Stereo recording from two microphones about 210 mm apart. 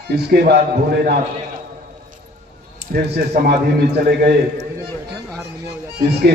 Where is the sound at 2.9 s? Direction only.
50° right (ahead or behind).